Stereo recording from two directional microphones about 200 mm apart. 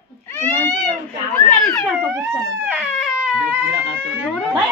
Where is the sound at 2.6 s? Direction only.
5° right (ahead or behind).